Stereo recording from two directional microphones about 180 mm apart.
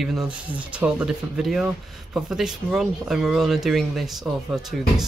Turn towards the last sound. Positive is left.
turn(degrees=-5)  # may be behind; listen again after turning